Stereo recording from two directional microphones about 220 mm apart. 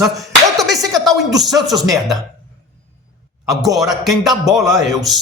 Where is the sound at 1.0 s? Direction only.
Centre (ahead or behind).